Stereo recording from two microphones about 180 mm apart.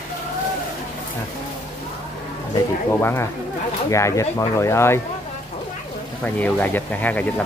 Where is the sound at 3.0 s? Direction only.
15° left (ahead or behind).